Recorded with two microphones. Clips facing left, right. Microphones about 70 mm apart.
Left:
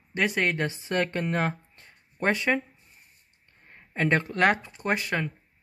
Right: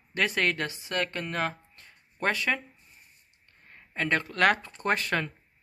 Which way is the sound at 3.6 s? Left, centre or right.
Left.